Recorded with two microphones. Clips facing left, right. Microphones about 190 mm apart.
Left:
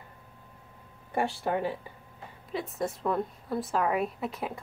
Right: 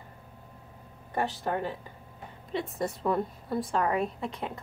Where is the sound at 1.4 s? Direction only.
10° left (ahead or behind).